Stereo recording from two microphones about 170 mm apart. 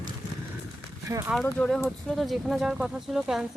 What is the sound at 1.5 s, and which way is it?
Speech, 5° left (ahead or behind).